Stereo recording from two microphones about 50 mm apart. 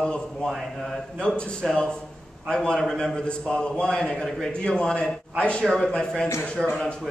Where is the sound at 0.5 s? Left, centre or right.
Centre.